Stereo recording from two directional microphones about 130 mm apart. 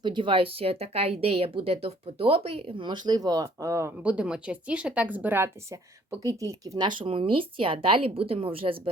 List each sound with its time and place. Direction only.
0.0 s speech: 40° right (ahead or behind)
4.0 s speech: 10° right (ahead or behind); by 6.8 s 25° right (ahead or behind)
6.8 s speech: 45° right (ahead or behind)